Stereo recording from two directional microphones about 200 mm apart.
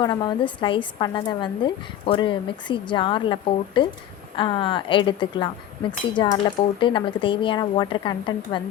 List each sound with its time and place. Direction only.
0.0 s speech: 20° left (ahead or behind)